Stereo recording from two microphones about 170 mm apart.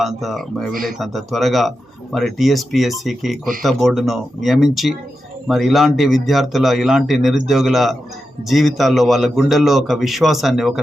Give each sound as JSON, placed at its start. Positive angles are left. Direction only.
{"t": 0.0, "sound": "a man's voice", "side_deg": 0}
{"t": 0.7, "sound": "speech", "side_deg": -55}
{"t": 0.9, "sound": "a man's voice", "side_deg": 0}